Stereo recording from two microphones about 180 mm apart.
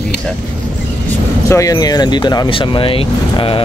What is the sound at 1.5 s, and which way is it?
Speech, 20° left (ahead or behind).